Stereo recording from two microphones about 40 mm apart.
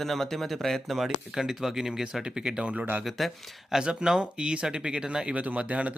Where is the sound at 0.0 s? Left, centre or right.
Centre.